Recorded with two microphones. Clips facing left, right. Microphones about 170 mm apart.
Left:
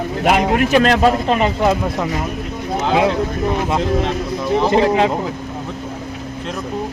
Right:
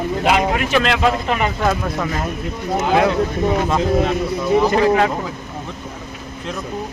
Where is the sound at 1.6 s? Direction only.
20° left (ahead or behind).